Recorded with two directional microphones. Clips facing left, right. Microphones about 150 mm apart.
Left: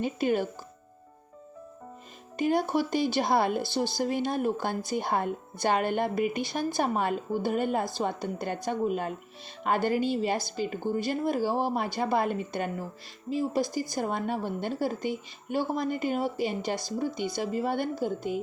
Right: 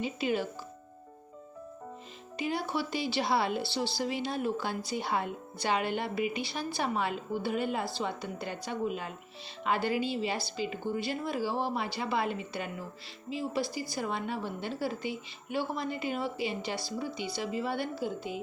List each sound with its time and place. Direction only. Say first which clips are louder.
0.0 s speech: left 4 dB; 50° left (ahead or behind)
2.3 s speech: left 7 dB; 45° left (ahead or behind)